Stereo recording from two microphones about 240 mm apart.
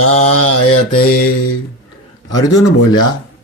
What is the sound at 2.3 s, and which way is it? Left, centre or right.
Speech, centre.